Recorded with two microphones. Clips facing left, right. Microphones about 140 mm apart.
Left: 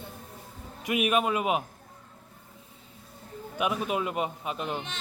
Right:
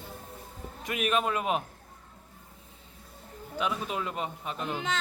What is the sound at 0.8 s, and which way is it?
Speech, 10° left (ahead or behind).